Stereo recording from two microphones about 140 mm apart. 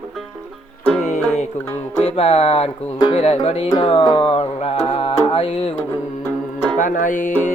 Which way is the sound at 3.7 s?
40° left (ahead or behind).